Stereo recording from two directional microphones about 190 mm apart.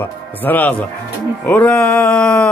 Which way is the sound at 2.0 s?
5° left (ahead or behind).